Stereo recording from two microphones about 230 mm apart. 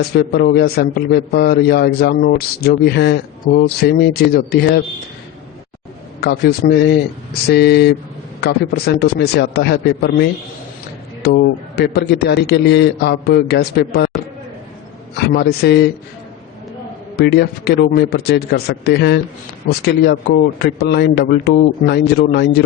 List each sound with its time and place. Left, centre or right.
0.2 s a man's voice: left
6.1 s a man's voice: left
15.3 s a man's voice: left
17.2 s a man's voice: left